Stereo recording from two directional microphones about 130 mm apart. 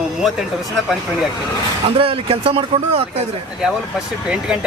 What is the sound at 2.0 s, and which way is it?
Speech, 45° right (ahead or behind).